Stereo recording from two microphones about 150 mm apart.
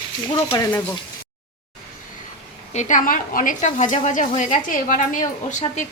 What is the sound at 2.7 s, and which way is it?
A woman's voice, 55° left (ahead or behind).